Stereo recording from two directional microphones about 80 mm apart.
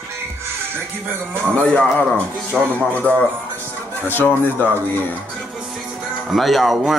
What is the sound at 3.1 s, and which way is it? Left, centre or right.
Speech, centre.